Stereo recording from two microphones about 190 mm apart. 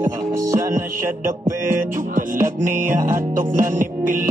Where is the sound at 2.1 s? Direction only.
45° right (ahead or behind).